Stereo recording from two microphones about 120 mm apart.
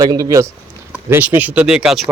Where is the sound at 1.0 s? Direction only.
20° right (ahead or behind); by 2.1 s 5° right (ahead or behind).